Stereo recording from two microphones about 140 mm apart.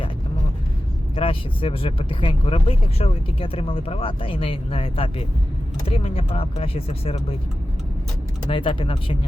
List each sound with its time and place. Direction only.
1.1 s speech: 40° left (ahead or behind)
8.4 s speech: 40° left (ahead or behind)